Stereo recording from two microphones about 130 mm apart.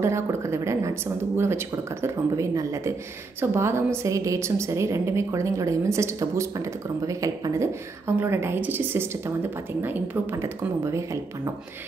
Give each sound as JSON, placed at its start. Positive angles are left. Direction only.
{"t": 0.0, "sound": "a woman's voice", "side_deg": -20}